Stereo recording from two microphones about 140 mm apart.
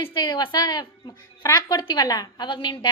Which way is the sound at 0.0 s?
35° left (ahead or behind).